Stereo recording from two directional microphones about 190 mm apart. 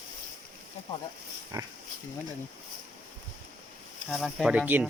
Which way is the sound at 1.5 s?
20° right (ahead or behind).